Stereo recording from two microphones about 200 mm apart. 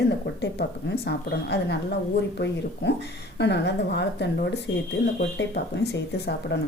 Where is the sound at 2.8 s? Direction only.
60° left (ahead or behind).